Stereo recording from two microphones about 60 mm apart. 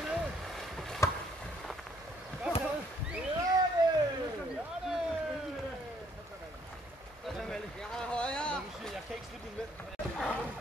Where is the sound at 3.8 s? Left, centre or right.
Right.